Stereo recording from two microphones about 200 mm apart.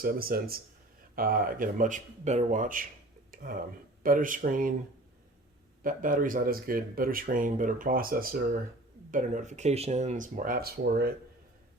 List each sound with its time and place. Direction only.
0.0 s speech: 45° right (ahead or behind)
5.8 s speech: 45° right (ahead or behind)